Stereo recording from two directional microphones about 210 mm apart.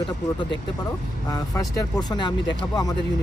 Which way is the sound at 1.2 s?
15° left (ahead or behind).